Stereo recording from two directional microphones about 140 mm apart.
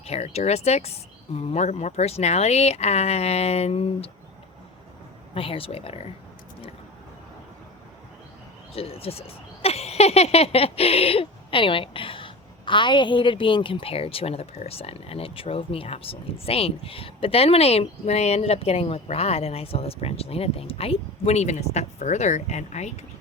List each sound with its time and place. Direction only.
0.0 s speech: 50° left (ahead or behind)
5.3 s speech: 40° left (ahead or behind)
8.7 s speech: 45° left (ahead or behind)